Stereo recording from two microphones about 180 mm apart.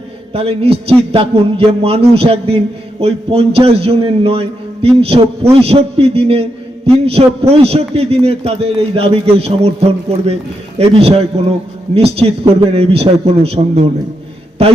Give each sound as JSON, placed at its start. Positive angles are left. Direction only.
{"t": 0.3, "sound": "a man's voice", "side_deg": -35}
{"t": 10.8, "sound": "a man's voice", "side_deg": -35}